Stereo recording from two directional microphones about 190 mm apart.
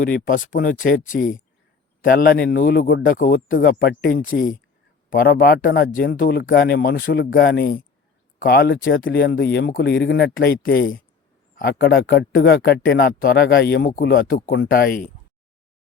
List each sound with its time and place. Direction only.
0.3 s a man's voice: 45° left (ahead or behind)
8.7 s speech: 90° left
9.0 s a man's voice: 55° left (ahead or behind)